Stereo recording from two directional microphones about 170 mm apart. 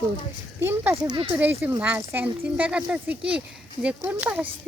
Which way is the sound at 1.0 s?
25° right (ahead or behind).